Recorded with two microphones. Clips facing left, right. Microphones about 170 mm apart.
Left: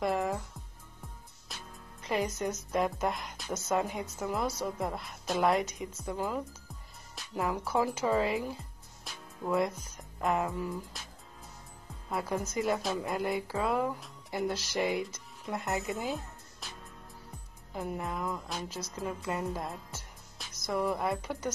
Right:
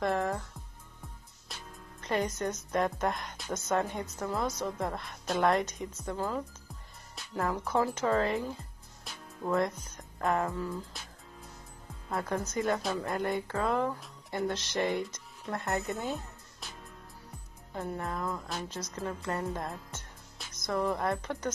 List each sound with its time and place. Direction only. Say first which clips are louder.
0.0 s music: even; 5° left (ahead or behind)
1.5 s speech: right 1 dB; 5° left (ahead or behind)
10.5 s speech: even; 15° left (ahead or behind)
12.1 s a woman's voice: even; 5° left (ahead or behind)
18.6 s speech: even; 10° left (ahead or behind)